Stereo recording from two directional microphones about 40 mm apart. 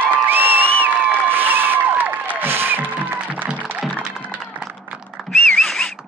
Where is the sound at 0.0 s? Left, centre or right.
Right.